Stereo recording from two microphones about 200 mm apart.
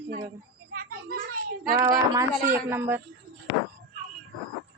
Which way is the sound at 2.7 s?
10° right (ahead or behind).